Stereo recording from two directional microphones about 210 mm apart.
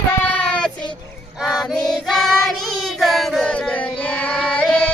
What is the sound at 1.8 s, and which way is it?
Child singing, centre (ahead or behind).